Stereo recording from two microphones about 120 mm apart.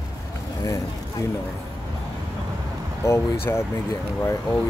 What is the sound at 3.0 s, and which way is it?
Speech, 20° left (ahead or behind).